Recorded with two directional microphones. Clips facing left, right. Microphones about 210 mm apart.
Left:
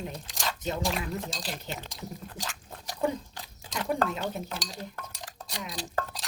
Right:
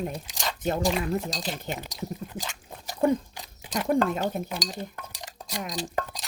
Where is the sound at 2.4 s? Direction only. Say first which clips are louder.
Right 1 dB; centre (ahead or behind).